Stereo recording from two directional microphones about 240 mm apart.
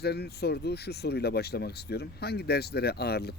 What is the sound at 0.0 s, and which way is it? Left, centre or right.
Speech, left.